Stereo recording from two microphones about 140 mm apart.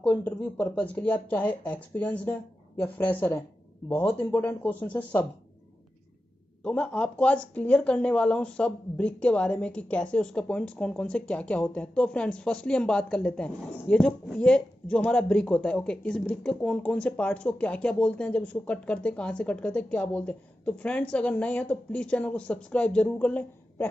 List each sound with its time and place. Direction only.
0.0 s speech: 10° left (ahead or behind)
6.6 s speech: 10° left (ahead or behind)